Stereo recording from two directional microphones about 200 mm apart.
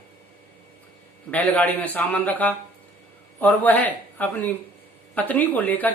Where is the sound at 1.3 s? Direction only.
10° left (ahead or behind).